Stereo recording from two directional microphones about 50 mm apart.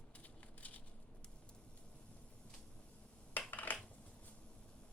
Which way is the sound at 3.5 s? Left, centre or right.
Left.